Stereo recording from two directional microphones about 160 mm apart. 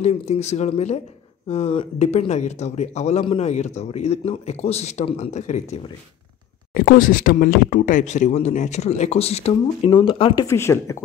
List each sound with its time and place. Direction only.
0.0 s speech: 40° left (ahead or behind)
6.7 s speech: 60° left (ahead or behind); by 10.4 s 35° left (ahead or behind)
10.4 s speech: 15° left (ahead or behind)